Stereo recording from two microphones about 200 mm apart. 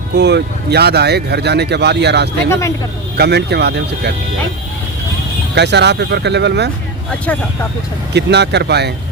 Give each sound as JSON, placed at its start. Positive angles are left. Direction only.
{"t": 0.1, "sound": "speech", "side_deg": -55}
{"t": 2.5, "sound": "speech", "side_deg": 15}
{"t": 3.2, "sound": "speech", "side_deg": -55}
{"t": 5.5, "sound": "speech", "side_deg": -60}
{"t": 7.3, "sound": "speech", "side_deg": 10}
{"t": 8.1, "sound": "speech", "side_deg": -60}